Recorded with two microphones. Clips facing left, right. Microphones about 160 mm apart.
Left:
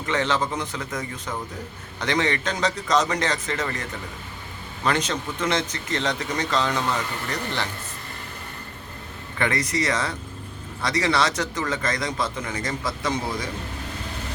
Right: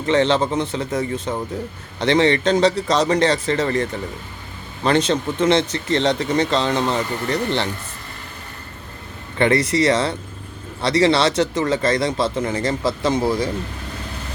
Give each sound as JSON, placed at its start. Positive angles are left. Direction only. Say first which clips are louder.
{"t": 0.0, "sound": "a man's voice", "louder": "right 7 dB", "side_deg": -30}
{"t": 9.4, "sound": "a man's voice", "louder": "right 8 dB", "side_deg": -30}